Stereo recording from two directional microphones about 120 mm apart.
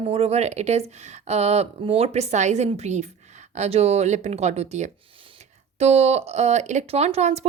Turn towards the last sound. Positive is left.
turn(degrees=-65)  # may be behind; listen again after turning